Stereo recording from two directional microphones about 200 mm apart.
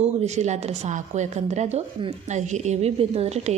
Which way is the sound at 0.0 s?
35° right (ahead or behind).